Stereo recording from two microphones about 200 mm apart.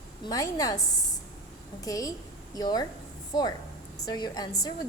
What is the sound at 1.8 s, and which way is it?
A woman's voice, 15° left (ahead or behind).